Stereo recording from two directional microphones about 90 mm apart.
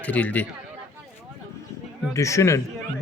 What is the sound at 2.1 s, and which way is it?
Speech, 35° left (ahead or behind).